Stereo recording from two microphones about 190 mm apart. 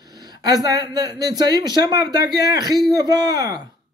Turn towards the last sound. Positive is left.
turn(degrees=-20)  # may be behind; listen again after turning